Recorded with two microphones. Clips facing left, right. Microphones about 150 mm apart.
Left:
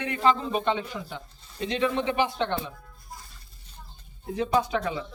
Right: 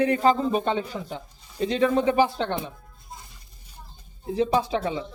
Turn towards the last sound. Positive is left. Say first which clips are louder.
# right 1 dB
turn(degrees=-30)  # may be behind; listen again after turning